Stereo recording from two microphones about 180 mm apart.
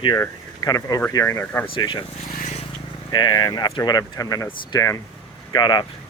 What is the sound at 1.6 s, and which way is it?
Speech, 30° left (ahead or behind).